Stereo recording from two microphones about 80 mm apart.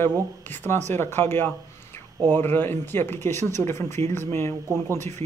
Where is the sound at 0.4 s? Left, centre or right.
Left.